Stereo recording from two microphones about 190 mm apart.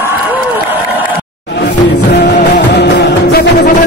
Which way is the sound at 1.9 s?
65° left (ahead or behind).